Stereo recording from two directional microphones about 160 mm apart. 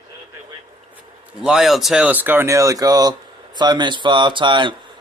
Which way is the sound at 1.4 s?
5° right (ahead or behind).